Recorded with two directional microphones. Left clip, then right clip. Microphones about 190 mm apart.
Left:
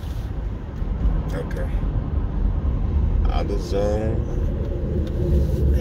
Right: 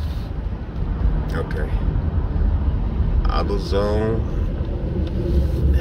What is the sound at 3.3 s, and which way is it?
Speech, 35° right (ahead or behind).